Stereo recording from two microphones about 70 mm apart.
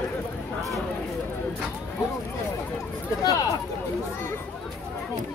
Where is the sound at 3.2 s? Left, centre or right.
Left.